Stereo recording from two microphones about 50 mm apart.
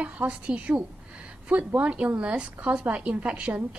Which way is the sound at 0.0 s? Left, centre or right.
Right.